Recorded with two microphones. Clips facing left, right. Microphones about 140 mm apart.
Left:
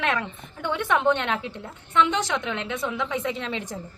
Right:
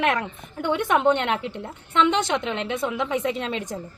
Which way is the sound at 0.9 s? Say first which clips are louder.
Right 1 dB; 15° right (ahead or behind).